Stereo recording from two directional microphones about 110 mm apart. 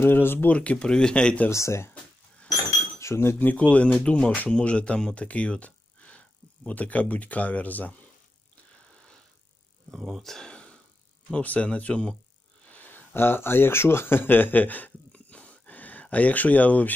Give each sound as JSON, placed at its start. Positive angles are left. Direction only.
{"t": 0.0, "sound": "speech", "side_deg": 20}
{"t": 1.5, "sound": "speech", "side_deg": 25}
{"t": 3.0, "sound": "speech", "side_deg": 25}
{"t": 9.8, "sound": "speech", "side_deg": 0}